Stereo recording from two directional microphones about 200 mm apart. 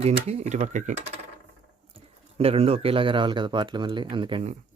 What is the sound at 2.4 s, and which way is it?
Speech, 30° right (ahead or behind).